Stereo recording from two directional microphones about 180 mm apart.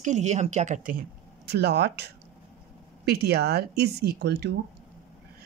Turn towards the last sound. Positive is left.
turn(degrees=-65)  # may be behind; listen again after turning